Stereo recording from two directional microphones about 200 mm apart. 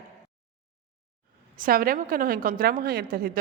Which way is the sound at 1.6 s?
45° right (ahead or behind).